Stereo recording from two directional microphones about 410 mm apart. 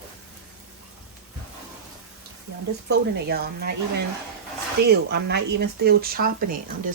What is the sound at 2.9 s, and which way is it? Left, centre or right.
Speech, right.